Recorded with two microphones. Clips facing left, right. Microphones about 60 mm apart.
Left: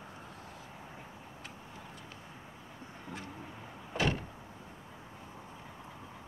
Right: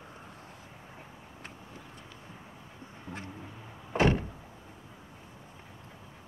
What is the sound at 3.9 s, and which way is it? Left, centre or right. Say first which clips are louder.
Door: right 7 dB; right.